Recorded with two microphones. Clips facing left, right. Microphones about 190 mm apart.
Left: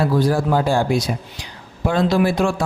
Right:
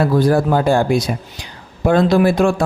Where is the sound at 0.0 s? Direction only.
55° right (ahead or behind).